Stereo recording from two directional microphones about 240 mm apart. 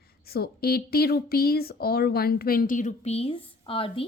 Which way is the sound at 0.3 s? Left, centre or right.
Left.